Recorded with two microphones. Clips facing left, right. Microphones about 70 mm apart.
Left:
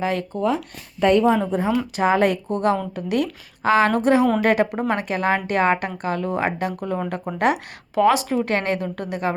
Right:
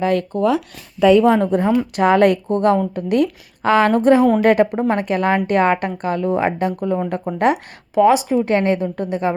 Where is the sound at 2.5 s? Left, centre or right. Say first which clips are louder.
Right 5 dB; right.